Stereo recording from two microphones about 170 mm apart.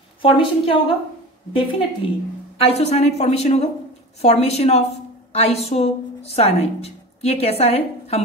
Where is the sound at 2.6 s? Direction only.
40° left (ahead or behind).